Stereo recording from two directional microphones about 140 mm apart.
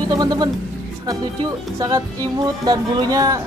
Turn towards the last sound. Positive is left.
turn(degrees=-25)  # may be behind; listen again after turning